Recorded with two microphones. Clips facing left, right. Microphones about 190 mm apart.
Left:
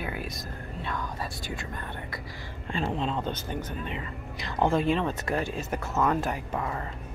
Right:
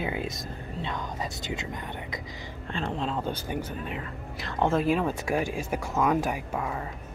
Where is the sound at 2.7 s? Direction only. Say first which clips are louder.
Left 1 dB; 5° left (ahead or behind).